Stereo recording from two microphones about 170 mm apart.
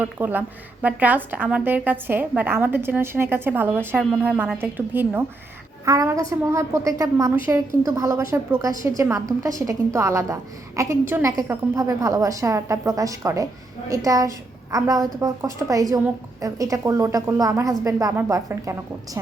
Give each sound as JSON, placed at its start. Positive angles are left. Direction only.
{"t": 0.0, "sound": "a woman's voice", "side_deg": -10}